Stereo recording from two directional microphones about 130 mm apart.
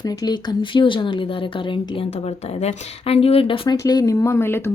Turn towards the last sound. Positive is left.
turn(degrees=20)  # may be behind; listen again after turning